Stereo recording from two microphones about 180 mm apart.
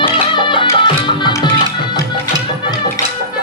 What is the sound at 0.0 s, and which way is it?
Music, 25° left (ahead or behind).